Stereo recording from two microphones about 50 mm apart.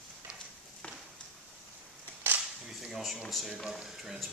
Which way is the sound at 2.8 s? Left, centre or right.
Centre.